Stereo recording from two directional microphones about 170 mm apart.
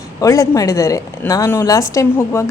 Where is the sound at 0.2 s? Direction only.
20° left (ahead or behind).